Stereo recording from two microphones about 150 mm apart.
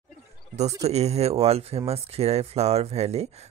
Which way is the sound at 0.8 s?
45° right (ahead or behind).